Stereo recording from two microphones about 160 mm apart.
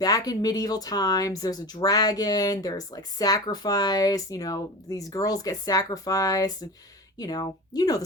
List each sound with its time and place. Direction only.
0.0 s speech: 25° left (ahead or behind)